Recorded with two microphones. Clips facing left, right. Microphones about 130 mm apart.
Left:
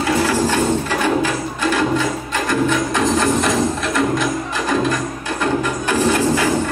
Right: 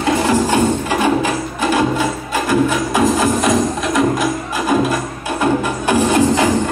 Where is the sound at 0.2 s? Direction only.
15° right (ahead or behind).